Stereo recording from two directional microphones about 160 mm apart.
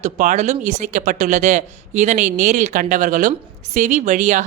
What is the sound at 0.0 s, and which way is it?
Speech, 50° right (ahead or behind).